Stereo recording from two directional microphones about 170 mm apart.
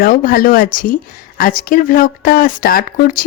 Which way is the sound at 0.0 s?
55° left (ahead or behind).